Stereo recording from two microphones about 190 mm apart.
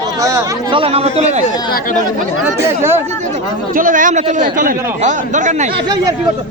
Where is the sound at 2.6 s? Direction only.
10° right (ahead or behind).